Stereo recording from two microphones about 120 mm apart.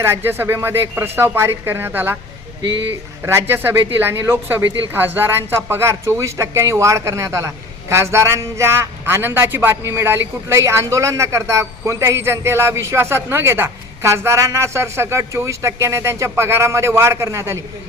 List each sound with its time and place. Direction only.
0.0 s a man's voice: 20° right (ahead or behind)
3.2 s a man's voice: 20° right (ahead or behind)